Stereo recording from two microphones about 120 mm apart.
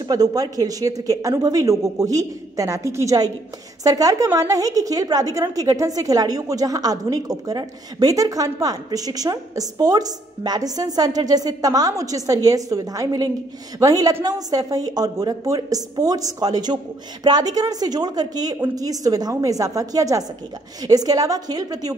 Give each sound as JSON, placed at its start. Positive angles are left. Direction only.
{"t": 0.1, "sound": "a woman's voice", "side_deg": -30}